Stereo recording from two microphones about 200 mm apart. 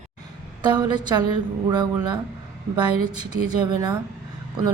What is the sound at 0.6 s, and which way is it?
Speech, 20° right (ahead or behind).